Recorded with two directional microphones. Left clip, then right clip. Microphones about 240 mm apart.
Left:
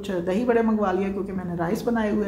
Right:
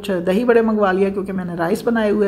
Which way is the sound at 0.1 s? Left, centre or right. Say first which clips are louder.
Right 7 dB; right.